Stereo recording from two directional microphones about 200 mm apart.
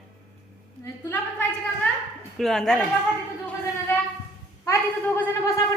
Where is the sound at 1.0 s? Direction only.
10° left (ahead or behind).